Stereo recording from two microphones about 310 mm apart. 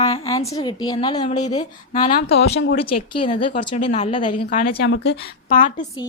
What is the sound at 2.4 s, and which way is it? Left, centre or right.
Speech, left.